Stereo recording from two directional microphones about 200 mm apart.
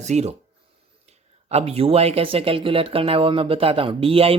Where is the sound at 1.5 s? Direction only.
30° right (ahead or behind).